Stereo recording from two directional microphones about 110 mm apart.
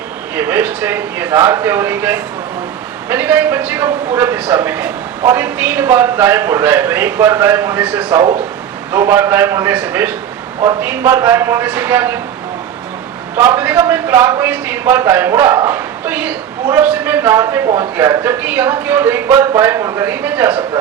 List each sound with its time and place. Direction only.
0.3 s a man's voice: 20° right (ahead or behind)
13.3 s a man's voice: 20° right (ahead or behind)